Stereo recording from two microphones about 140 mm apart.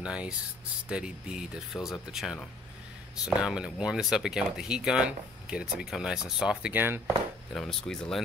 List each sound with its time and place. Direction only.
0.0 s speech: 5° right (ahead or behind)
7.5 s speech: 5° left (ahead or behind)